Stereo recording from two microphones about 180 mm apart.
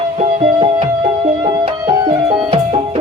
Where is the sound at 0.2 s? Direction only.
30° right (ahead or behind).